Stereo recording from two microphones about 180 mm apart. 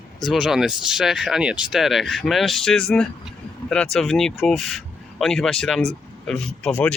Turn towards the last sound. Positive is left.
turn(degrees=5)  # may be behind; listen again after turning